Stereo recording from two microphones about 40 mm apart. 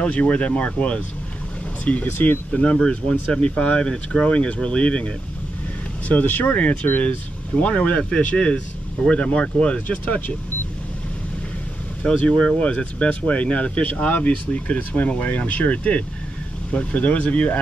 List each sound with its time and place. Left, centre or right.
0.0 s speech: left
2.0 s speech: left
2.5 s speech: left
3.8 s speech: left
6.0 s speech: left
6.5 s speech: left
9.8 s speech: left
12.0 s speech: left
12.5 s speech: left
13.8 s speech: left